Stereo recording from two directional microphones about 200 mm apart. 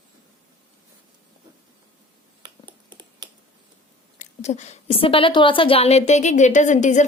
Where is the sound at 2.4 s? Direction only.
20° right (ahead or behind).